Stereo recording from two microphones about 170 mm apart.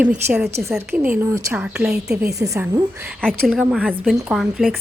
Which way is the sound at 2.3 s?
20° right (ahead or behind).